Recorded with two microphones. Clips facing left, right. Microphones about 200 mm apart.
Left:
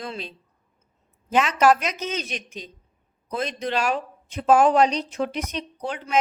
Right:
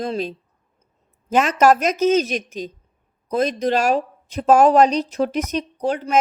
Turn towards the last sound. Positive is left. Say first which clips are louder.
# right 7 dB
turn(degrees=-40)  # may be behind; listen again after turning